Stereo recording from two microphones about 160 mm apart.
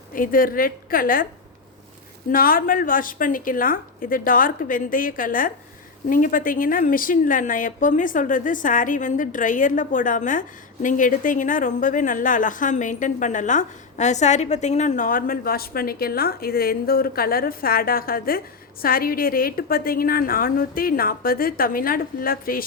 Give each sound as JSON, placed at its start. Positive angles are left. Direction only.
{"t": 0.1, "sound": "a woman's voice", "side_deg": 60}
{"t": 2.3, "sound": "a woman's voice", "side_deg": 60}